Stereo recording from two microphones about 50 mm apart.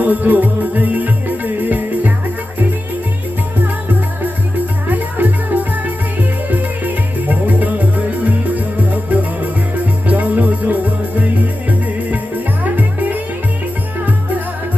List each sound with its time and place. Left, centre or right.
0.0 s music: right
4.9 s music: right
12.7 s music: right